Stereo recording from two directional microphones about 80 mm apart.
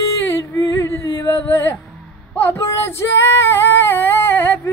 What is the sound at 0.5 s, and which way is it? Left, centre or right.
Yodeling, left.